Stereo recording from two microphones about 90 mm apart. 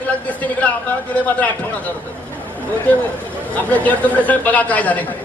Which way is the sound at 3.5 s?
15° left (ahead or behind).